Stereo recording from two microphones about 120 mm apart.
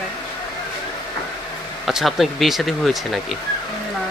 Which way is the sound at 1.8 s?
Centre (ahead or behind).